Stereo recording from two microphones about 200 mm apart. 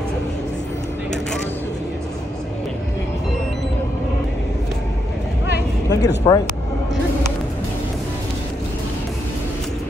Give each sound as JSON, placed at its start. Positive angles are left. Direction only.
{"t": 5.9, "sound": "speech", "side_deg": 20}